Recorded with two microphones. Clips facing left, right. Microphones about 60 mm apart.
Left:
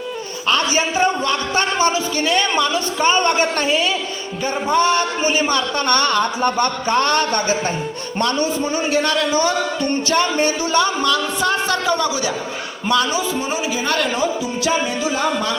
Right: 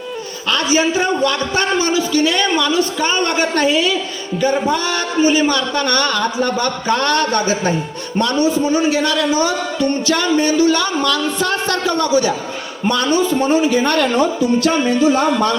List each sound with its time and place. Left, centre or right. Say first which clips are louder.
0.5 s a man's voice: right 3 dB; left; by 12.3 s centre
12.9 s a woman's voice: right 3 dB; centre